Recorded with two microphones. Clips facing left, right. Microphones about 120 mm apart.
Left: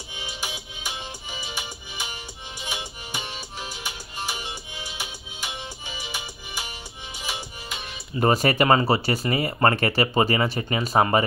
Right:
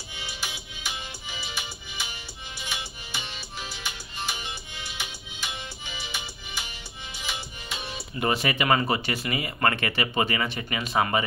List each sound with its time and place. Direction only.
0.1 s music: 15° left (ahead or behind)
8.2 s speech: 40° left (ahead or behind)